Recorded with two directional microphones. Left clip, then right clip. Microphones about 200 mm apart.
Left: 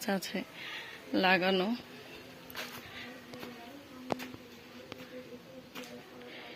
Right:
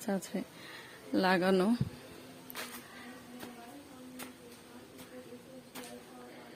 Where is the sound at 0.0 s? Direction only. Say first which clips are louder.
Left 2 dB; 15° right (ahead or behind); by 1.8 s 35° right (ahead or behind).